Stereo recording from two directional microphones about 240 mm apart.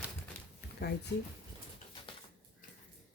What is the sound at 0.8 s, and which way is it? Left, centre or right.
Speech, left.